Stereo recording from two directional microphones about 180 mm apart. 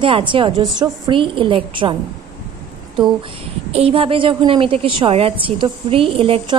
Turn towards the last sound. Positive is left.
turn(degrees=-30)  # may be behind; listen again after turning